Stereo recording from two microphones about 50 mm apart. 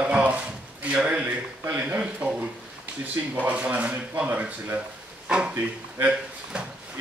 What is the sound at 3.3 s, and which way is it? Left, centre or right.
Speech, right.